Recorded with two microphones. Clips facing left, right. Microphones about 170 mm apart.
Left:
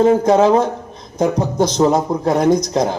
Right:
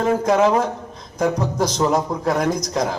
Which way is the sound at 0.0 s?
30° left (ahead or behind).